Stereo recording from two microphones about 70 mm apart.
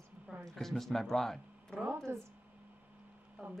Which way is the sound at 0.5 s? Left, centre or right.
Centre.